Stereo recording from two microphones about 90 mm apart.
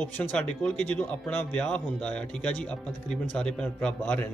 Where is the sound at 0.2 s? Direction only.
15° left (ahead or behind).